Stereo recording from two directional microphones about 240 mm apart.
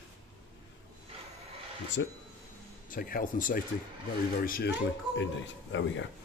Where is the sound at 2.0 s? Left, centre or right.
Left.